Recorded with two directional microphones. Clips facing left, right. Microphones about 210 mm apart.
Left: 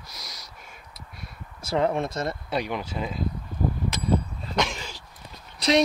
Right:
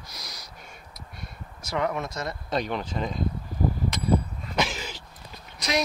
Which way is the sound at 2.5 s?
10° left (ahead or behind).